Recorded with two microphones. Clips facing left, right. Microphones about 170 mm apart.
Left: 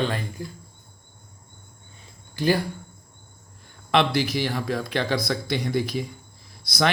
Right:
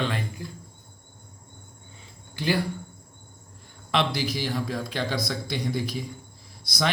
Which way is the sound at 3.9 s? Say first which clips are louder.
Left 4 dB; 60° left (ahead or behind).